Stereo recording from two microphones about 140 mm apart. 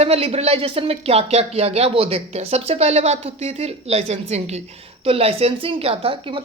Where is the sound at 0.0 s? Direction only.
45° right (ahead or behind).